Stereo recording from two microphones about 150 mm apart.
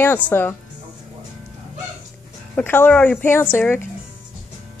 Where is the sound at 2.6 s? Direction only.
10° left (ahead or behind).